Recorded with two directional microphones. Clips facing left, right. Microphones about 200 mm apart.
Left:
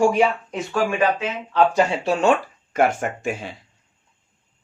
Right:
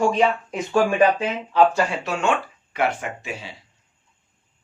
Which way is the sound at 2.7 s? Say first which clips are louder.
Left 4 dB; 45° left (ahead or behind).